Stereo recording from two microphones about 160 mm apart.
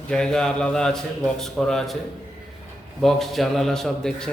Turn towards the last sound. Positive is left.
turn(degrees=5)  # may be behind; listen again after turning